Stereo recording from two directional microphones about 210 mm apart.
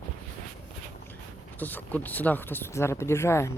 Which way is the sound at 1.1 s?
10° left (ahead or behind).